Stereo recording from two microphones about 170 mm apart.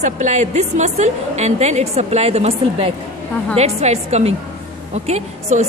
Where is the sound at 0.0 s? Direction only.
45° right (ahead or behind).